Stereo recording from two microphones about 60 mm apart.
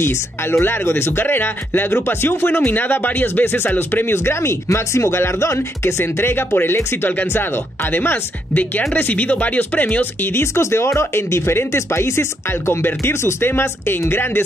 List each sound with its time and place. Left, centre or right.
0.0 s speech: left
7.1 s speech: left
10.3 s speech: left